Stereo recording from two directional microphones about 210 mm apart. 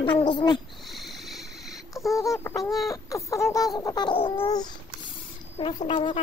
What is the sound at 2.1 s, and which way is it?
Speech, 15° left (ahead or behind).